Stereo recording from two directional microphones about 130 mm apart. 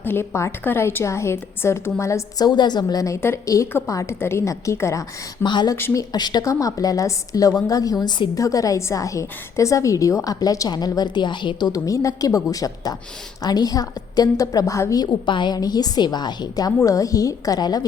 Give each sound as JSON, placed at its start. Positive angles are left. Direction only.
{"t": 0.0, "sound": "a woman's voice", "side_deg": 15}
{"t": 2.5, "sound": "a woman's voice", "side_deg": 35}
{"t": 5.5, "sound": "speech", "side_deg": 35}
{"t": 5.7, "sound": "a woman's voice", "side_deg": 20}